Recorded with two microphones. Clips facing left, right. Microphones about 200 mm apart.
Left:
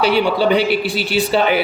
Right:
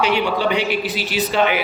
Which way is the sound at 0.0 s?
35° left (ahead or behind).